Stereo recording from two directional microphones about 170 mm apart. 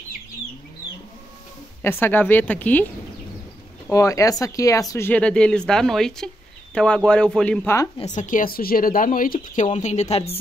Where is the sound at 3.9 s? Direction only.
20° left (ahead or behind).